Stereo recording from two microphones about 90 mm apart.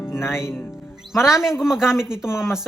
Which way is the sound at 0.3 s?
30° left (ahead or behind).